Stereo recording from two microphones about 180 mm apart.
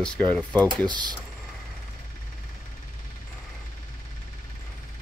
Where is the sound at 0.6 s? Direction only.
25° right (ahead or behind).